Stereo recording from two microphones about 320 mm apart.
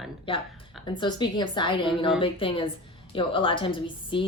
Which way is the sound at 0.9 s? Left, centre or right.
Centre.